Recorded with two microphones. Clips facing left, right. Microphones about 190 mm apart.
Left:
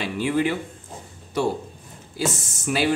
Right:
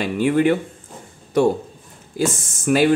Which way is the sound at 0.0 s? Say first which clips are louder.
Right 5 dB; 50° right (ahead or behind).